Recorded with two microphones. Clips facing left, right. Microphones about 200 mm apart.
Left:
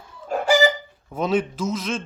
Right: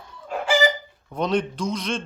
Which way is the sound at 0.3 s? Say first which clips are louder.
Left 4 dB; 45° left (ahead or behind).